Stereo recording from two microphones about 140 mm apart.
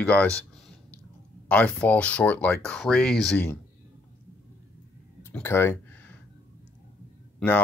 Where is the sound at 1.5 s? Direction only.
10° left (ahead or behind).